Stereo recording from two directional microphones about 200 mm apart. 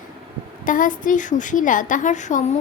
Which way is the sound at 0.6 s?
40° left (ahead or behind).